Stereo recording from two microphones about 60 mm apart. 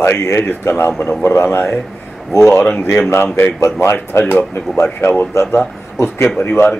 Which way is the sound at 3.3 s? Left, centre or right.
Left.